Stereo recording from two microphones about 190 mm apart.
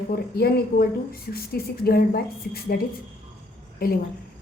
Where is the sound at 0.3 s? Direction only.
55° left (ahead or behind).